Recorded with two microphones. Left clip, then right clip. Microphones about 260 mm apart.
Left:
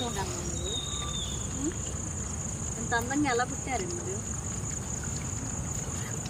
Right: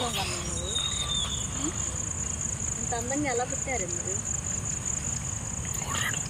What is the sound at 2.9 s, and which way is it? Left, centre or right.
Speech, centre.